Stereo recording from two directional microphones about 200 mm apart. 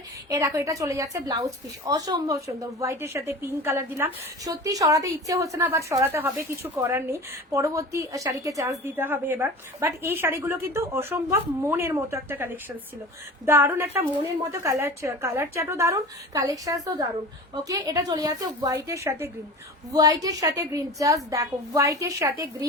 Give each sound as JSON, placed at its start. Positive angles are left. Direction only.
{"t": 0.3, "sound": "speech", "side_deg": -15}